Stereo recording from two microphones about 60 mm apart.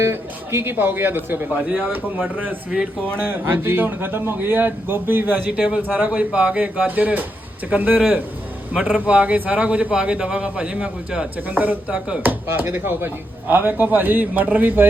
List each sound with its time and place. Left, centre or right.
0.0 s speech: right
5.5 s a man's voice: centre
11.3 s speech: right
12.2 s speech: right